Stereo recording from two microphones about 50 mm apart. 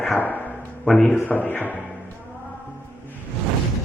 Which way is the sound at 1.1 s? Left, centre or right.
Left.